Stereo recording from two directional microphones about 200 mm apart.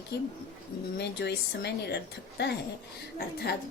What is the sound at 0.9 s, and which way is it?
Speech, 55° left (ahead or behind).